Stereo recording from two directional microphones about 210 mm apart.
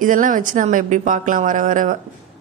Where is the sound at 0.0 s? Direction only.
40° right (ahead or behind).